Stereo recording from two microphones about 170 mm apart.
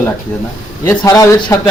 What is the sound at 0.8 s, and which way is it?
Speech, 20° left (ahead or behind).